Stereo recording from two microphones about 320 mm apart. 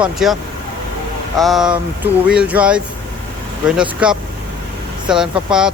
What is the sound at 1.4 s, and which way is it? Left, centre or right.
Speech, centre.